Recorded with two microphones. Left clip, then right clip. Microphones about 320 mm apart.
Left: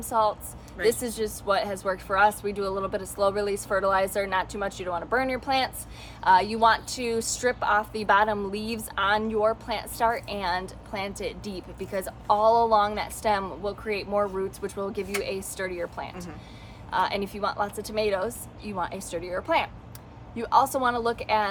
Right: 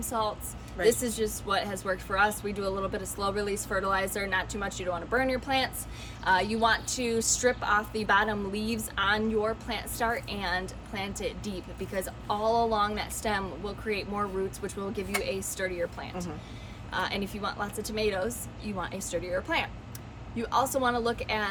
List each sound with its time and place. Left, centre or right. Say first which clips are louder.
0.0 s a woman's voice: left 6 dB; centre